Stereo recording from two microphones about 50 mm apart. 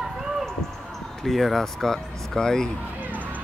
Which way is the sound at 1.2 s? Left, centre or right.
Centre.